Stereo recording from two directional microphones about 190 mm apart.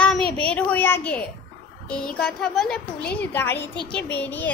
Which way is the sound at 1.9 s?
5° left (ahead or behind).